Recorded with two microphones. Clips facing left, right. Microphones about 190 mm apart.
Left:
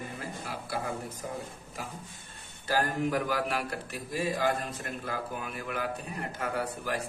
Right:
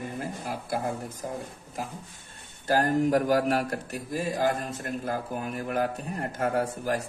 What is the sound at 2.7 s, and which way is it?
A man's voice, 45° right (ahead or behind).